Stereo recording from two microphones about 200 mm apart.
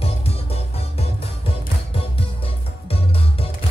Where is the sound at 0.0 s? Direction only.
30° left (ahead or behind).